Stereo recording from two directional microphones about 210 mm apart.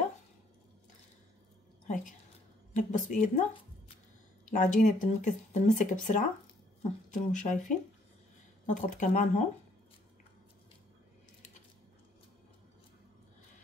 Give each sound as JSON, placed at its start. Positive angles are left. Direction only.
{"t": 2.7, "sound": "speech", "side_deg": 35}
{"t": 4.5, "sound": "speech", "side_deg": 35}